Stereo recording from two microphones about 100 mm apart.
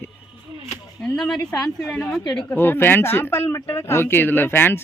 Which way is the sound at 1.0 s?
10° left (ahead or behind).